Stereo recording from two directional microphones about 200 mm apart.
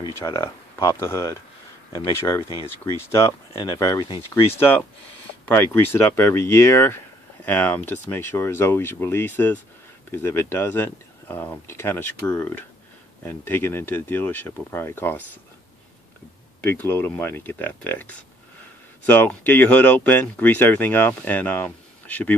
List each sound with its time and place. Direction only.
0.2 s speech: 15° left (ahead or behind)
5.4 s speech: 10° left (ahead or behind)
16.6 s speech: 10° left (ahead or behind)